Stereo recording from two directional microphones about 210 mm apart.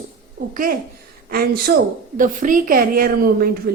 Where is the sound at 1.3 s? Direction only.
45° right (ahead or behind).